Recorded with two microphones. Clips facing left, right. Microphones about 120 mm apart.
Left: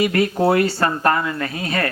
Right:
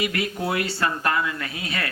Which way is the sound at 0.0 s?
40° left (ahead or behind).